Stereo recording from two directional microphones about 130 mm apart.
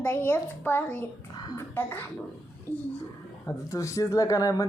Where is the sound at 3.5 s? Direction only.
25° left (ahead or behind).